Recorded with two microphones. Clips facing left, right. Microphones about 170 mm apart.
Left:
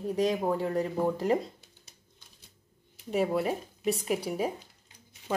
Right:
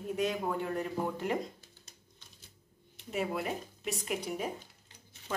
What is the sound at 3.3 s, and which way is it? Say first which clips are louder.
A woman's voice: left 6 dB; 35° left (ahead or behind).